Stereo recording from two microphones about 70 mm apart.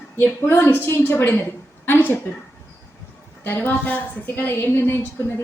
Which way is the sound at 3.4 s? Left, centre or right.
Left.